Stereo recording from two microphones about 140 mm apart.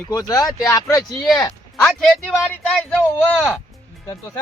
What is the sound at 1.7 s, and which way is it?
Speech, 5° left (ahead or behind).